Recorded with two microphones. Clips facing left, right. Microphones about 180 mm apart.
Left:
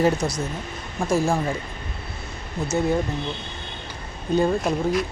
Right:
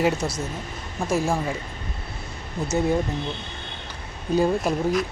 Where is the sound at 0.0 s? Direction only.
5° right (ahead or behind).